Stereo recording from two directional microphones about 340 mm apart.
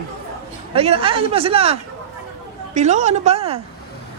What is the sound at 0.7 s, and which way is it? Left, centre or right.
A man's voice, centre.